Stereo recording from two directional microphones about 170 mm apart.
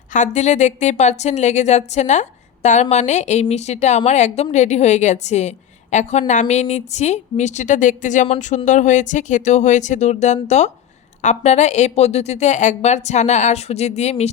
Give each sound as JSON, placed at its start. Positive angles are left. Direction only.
{"t": 0.1, "sound": "a woman's voice", "side_deg": 45}